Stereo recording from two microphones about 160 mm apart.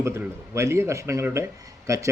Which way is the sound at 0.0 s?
15° right (ahead or behind).